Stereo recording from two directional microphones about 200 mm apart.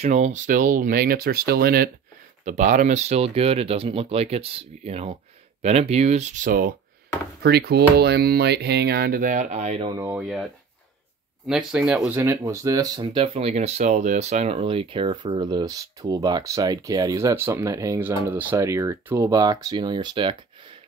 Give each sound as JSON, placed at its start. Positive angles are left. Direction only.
{"t": 0.0, "sound": "speech", "side_deg": -35}
{"t": 2.4, "sound": "speech", "side_deg": -40}
{"t": 10.1, "sound": "speech", "side_deg": 0}